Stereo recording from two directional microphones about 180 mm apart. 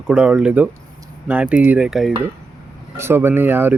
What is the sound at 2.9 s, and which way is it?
Speech, 15° right (ahead or behind).